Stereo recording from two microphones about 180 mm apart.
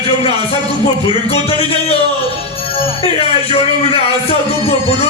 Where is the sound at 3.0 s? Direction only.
35° left (ahead or behind).